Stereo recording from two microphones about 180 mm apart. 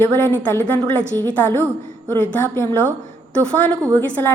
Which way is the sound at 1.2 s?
10° left (ahead or behind).